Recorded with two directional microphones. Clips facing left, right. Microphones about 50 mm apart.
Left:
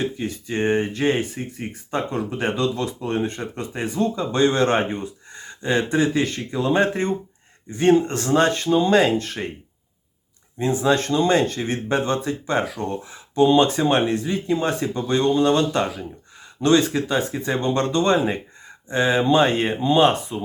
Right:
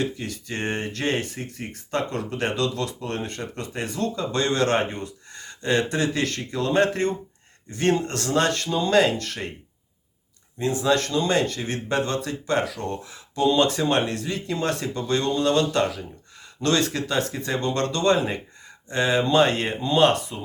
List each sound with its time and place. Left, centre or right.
0.0 s speech: left
10.6 s speech: left